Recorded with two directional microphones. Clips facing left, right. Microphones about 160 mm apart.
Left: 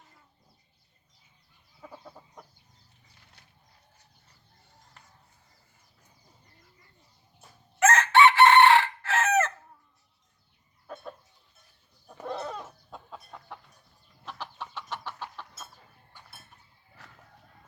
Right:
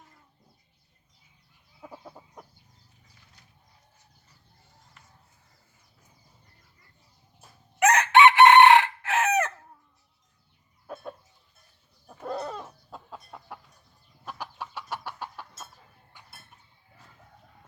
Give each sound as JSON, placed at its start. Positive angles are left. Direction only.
{"t": 1.9, "sound": "chicken", "side_deg": -10}
{"t": 7.8, "sound": "chicken", "side_deg": -15}
{"t": 12.2, "sound": "chicken", "side_deg": 0}
{"t": 15.6, "sound": "clip-clop", "side_deg": 0}
{"t": 17.0, "sound": "a sound", "side_deg": 75}